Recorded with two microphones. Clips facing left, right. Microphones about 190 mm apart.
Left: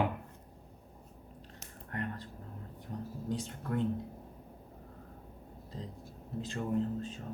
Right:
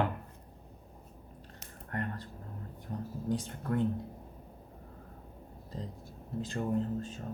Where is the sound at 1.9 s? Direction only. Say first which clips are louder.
Right 2 dB; 45° right (ahead or behind).